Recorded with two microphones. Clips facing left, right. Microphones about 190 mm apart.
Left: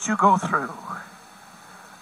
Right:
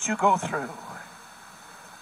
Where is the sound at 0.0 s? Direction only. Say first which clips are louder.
Left 3 dB; 20° right (ahead or behind).